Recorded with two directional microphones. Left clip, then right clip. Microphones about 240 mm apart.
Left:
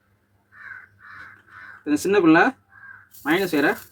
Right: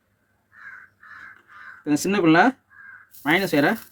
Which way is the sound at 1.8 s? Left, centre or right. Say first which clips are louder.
Left 2 dB; right.